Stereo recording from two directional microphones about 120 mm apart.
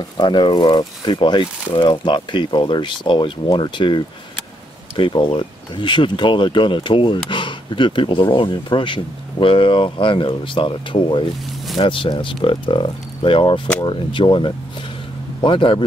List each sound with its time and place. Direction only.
0.2 s speech: 40° left (ahead or behind)